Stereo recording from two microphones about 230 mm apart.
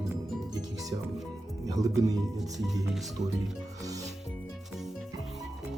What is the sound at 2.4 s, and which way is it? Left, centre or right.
Music, centre.